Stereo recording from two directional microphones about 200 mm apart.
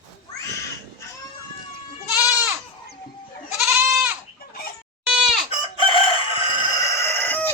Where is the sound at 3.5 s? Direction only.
Centre (ahead or behind).